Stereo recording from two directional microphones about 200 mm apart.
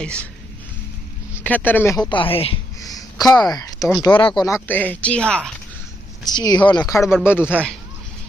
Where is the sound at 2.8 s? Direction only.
20° left (ahead or behind).